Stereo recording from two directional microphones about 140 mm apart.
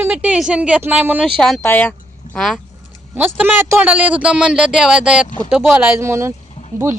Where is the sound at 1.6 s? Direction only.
15° left (ahead or behind).